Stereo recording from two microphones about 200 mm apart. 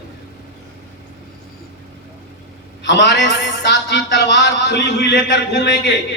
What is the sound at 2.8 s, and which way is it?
A man's voice, 60° left (ahead or behind).